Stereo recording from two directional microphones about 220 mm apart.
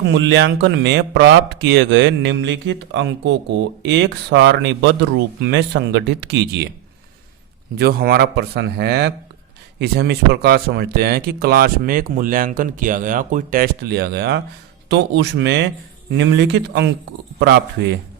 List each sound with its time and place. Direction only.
0.1 s speech: 55° right (ahead or behind)
7.8 s speech: 45° right (ahead or behind)